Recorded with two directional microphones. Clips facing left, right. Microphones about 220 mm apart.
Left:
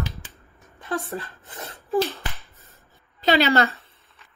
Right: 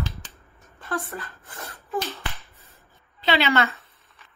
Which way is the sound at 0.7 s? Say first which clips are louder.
Left 2 dB; 20° left (ahead or behind).